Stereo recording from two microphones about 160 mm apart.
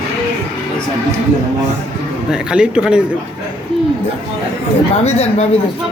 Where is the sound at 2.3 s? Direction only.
5° right (ahead or behind).